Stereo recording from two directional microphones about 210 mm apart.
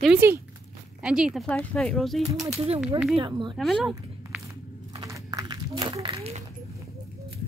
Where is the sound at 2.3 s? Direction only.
15° right (ahead or behind).